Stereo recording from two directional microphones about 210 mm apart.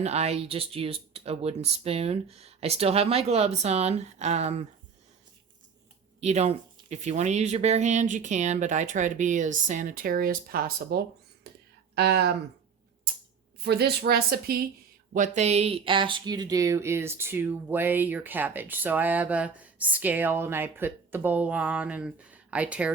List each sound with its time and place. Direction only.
0.0 s speech: 30° right (ahead or behind)
6.1 s a woman's voice: 30° right (ahead or behind); by 12.4 s 55° right (ahead or behind)
13.7 s a woman's voice: 50° right (ahead or behind)
15.4 s speech: 30° right (ahead or behind); by 22.9 s 5° right (ahead or behind)